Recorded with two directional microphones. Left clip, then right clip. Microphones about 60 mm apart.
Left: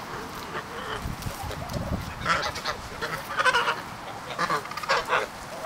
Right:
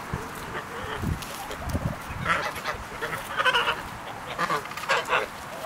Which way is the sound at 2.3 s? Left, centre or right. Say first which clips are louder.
Even; centre.